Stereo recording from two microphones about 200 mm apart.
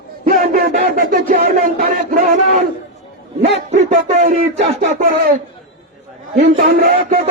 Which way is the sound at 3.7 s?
35° right (ahead or behind).